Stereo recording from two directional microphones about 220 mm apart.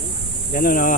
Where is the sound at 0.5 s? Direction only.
40° left (ahead or behind).